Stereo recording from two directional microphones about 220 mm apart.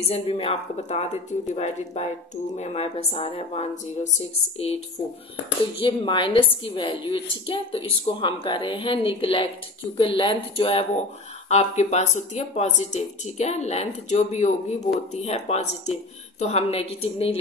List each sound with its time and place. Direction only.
0.1 s a woman's voice: 25° left (ahead or behind)